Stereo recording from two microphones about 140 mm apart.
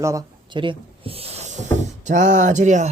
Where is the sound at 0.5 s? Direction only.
35° right (ahead or behind); by 1.6 s 50° right (ahead or behind).